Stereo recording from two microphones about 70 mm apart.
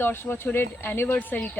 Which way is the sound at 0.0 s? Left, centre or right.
Left.